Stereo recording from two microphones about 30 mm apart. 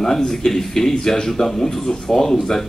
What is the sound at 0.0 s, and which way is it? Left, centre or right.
Speech, centre.